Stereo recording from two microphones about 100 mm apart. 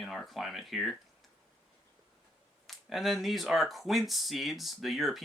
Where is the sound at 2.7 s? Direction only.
Centre (ahead or behind).